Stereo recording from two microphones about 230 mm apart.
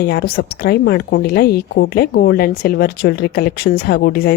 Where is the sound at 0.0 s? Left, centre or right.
Left.